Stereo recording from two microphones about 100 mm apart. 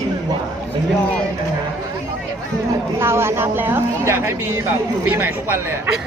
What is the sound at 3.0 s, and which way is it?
A woman's voice, 25° right (ahead or behind).